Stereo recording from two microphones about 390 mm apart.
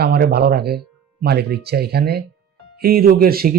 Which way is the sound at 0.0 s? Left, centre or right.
Right.